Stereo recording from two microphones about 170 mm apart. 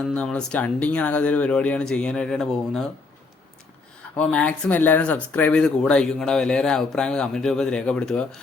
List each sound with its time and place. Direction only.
0.0 s speech: 5° left (ahead or behind)
4.2 s speech: 5° left (ahead or behind)